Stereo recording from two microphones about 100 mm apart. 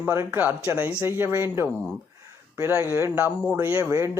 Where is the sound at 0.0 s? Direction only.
25° right (ahead or behind).